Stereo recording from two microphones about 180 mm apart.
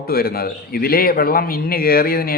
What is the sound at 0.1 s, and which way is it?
A man's voice, 60° left (ahead or behind).